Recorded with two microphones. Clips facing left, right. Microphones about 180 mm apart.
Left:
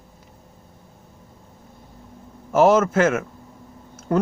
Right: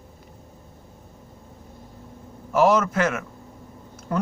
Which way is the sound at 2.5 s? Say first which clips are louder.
Left 3 dB; 45° left (ahead or behind).